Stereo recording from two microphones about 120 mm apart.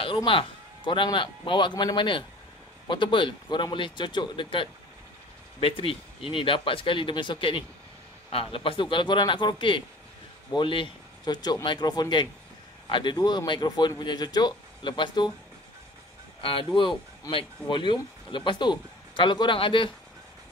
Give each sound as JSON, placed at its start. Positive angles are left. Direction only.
{"t": 0.0, "sound": "a man's voice", "side_deg": 45}
{"t": 17.3, "sound": "speech", "side_deg": 45}